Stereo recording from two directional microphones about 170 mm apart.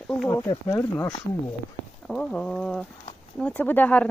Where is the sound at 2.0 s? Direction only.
5° left (ahead or behind).